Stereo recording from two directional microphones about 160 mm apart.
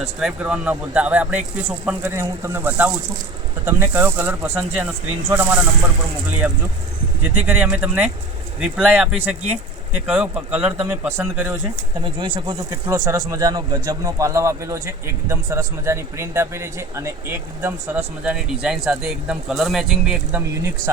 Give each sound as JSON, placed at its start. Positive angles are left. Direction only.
{"t": 0.2, "sound": "speech", "side_deg": -5}
{"t": 7.3, "sound": "speech", "side_deg": -10}
{"t": 12.0, "sound": "speech", "side_deg": -30}
{"t": 12.7, "sound": "speech", "side_deg": -15}